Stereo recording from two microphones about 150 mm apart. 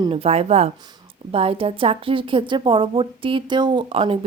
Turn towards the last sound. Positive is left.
turn(degrees=-40)  # may be behind; listen again after turning